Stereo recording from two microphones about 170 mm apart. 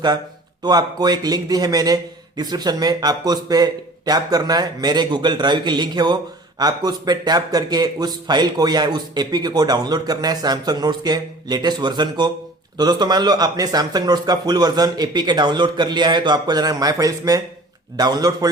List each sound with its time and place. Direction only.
0.6 s a man's voice: 25° right (ahead or behind)